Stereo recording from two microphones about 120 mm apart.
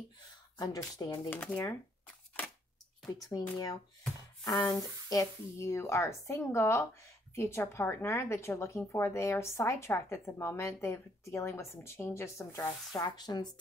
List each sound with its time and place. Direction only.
0.6 s speech: 35° left (ahead or behind)
1.3 s speech: 10° left (ahead or behind)
3.1 s speech: 30° left (ahead or behind)
13.0 s speech: 35° left (ahead or behind)